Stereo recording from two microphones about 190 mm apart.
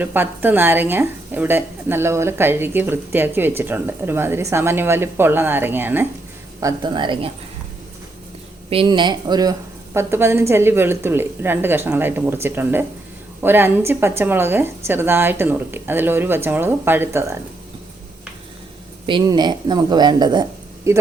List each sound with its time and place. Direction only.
0.0 s a woman's voice: 10° right (ahead or behind); by 7.3 s 25° right (ahead or behind)
8.7 s a woman's voice: 25° right (ahead or behind)
19.0 s a woman's voice: 25° right (ahead or behind)